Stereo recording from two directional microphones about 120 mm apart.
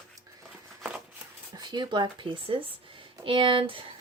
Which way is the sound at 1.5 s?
35° right (ahead or behind).